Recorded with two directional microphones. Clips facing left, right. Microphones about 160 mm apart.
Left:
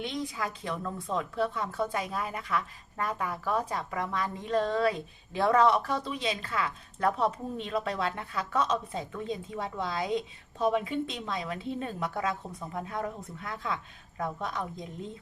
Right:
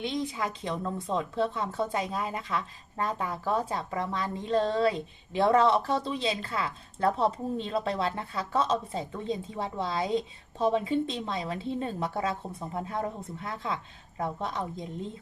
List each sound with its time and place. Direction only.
0.0 s speech: 25° right (ahead or behind)